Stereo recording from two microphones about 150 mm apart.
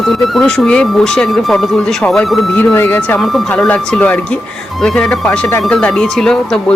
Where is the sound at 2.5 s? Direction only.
15° left (ahead or behind).